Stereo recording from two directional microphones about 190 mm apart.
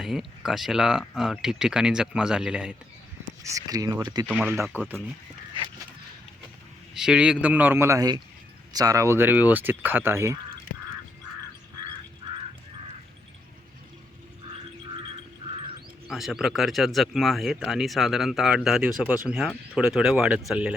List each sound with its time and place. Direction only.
0.0 s speech: centre (ahead or behind)
3.4 s speech: 15° right (ahead or behind)
4.3 s speech: 10° right (ahead or behind)
6.9 s speech: 5° right (ahead or behind)
15.4 s crow: 30° right (ahead or behind)
16.0 s speech: centre (ahead or behind)